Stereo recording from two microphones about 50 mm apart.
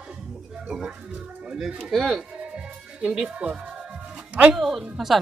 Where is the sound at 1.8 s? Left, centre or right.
Centre.